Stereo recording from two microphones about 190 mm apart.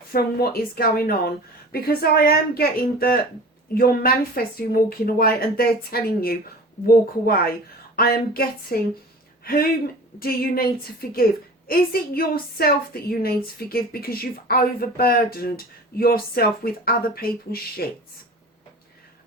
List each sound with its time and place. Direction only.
0.1 s a woman's voice: 55° left (ahead or behind)